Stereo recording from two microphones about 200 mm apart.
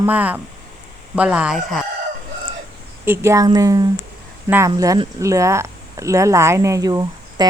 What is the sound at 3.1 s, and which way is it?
Speech, 15° right (ahead or behind).